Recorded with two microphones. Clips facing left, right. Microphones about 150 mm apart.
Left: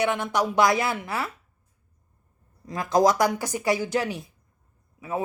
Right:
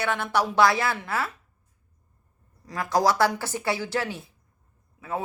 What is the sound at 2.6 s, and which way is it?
Speech, 20° left (ahead or behind).